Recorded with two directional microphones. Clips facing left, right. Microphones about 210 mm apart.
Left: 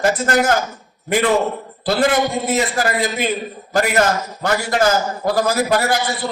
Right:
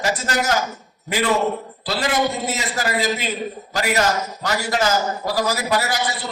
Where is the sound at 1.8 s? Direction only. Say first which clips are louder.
Left 5 dB; 55° left (ahead or behind).